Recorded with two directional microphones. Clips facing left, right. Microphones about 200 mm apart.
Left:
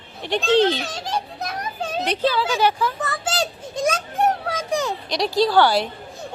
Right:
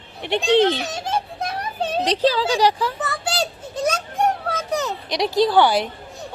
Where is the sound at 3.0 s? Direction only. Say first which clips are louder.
Even; 5° right (ahead or behind).